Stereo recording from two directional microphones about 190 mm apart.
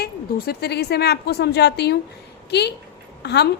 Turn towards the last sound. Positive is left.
turn(degrees=60)  # may be behind; listen again after turning